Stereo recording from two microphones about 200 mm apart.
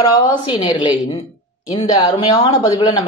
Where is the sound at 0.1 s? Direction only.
20° left (ahead or behind).